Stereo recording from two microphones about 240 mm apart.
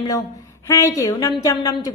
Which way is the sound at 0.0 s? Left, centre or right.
Centre.